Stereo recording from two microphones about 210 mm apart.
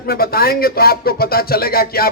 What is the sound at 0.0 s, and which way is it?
A man's voice, 45° left (ahead or behind).